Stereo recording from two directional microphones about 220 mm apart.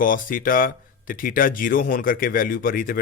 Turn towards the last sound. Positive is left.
turn(degrees=40)  # may be behind; listen again after turning